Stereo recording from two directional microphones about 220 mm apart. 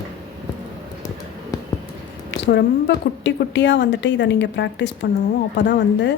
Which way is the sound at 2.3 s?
50° left (ahead or behind).